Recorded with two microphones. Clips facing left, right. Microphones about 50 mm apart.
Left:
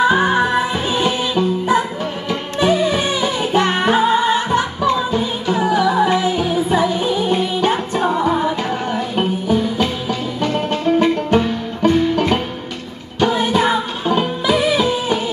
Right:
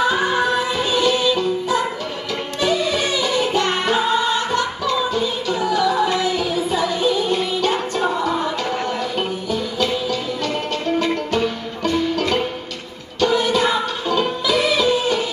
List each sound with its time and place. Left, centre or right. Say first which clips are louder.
0.0 s music: left 4 dB; left